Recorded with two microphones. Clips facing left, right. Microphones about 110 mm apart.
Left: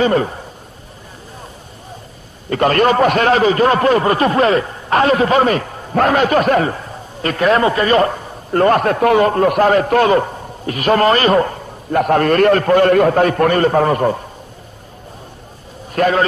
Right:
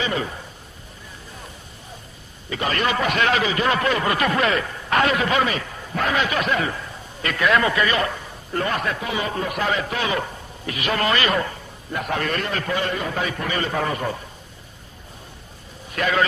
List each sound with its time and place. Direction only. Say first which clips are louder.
0.0 s a man's voice: left 11 dB; 45° left (ahead or behind)
2.5 s a man's voice: left 10 dB; 50° left (ahead or behind)
15.9 s a man's voice: left 7 dB; 40° left (ahead or behind)